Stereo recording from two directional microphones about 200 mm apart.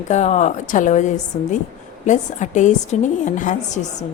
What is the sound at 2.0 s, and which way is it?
A woman's voice, 35° left (ahead or behind).